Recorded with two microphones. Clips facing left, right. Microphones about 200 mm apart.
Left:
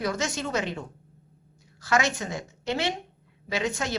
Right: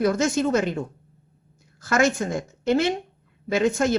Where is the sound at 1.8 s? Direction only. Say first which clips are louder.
Right 5 dB; 50° right (ahead or behind).